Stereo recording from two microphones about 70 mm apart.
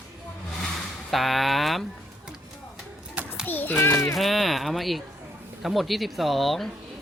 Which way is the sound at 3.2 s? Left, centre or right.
Right.